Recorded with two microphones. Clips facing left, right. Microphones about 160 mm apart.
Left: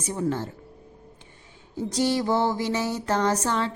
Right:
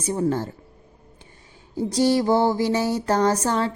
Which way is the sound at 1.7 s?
35° right (ahead or behind).